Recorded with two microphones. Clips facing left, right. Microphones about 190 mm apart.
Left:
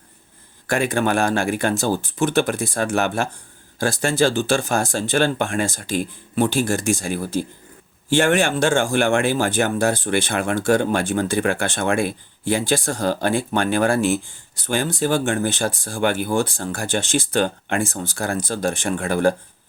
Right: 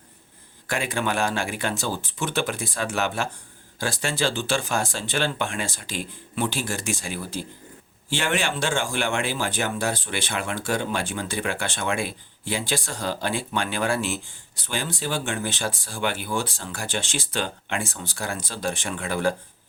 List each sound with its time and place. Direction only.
0.7 s speech: 45° left (ahead or behind)